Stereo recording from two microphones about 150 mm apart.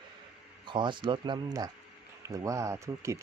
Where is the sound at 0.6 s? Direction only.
30° right (ahead or behind).